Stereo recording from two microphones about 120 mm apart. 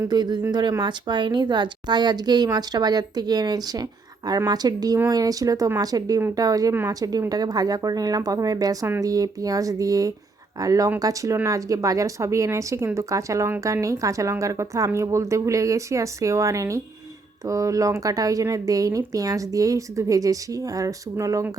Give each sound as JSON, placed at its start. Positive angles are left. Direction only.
{"t": 0.1, "sound": "a woman's voice", "side_deg": -35}